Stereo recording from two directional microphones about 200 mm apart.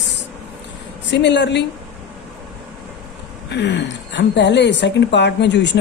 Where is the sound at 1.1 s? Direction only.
60° left (ahead or behind).